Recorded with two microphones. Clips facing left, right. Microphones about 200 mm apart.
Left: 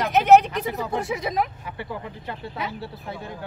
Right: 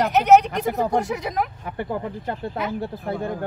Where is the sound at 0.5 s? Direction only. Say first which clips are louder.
Right 5 dB; 50° right (ahead or behind).